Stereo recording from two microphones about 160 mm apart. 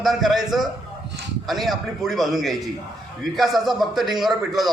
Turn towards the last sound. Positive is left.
turn(degrees=0)  # may be behind; listen again after turning